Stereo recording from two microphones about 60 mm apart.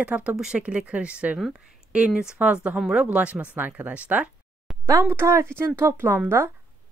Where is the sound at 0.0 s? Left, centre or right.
Right.